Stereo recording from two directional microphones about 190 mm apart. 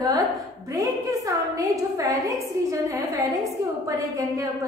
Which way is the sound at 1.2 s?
15° right (ahead or behind).